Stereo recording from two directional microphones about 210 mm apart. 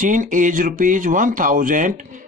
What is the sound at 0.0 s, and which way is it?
Speech, 40° right (ahead or behind).